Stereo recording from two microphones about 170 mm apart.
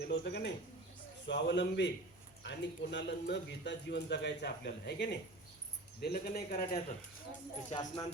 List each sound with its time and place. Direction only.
0.0 s speech: 80° left
6.5 s speech: 50° left (ahead or behind)
7.7 s speech: 20° left (ahead or behind)